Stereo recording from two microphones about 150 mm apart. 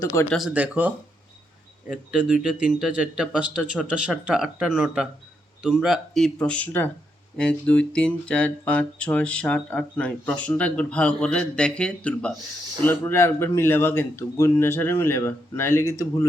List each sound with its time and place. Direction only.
0.0 s speech: 15° left (ahead or behind)
0.3 s speech: 5° right (ahead or behind); by 16.2 s 20° left (ahead or behind)